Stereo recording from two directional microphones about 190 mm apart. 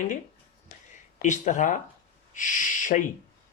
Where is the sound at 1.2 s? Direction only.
40° left (ahead or behind).